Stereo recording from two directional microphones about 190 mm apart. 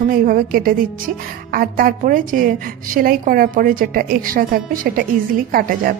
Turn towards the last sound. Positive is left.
turn(degrees=-50)  # may be behind; listen again after turning